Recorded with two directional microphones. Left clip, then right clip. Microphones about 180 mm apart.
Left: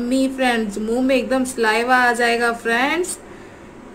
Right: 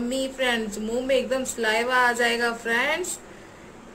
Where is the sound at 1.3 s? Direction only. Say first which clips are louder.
Left 6 dB; 30° left (ahead or behind).